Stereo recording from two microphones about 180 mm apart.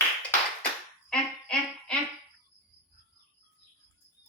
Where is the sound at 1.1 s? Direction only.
5° left (ahead or behind).